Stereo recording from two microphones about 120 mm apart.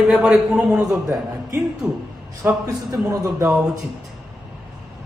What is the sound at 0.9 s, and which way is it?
Speech, 30° right (ahead or behind).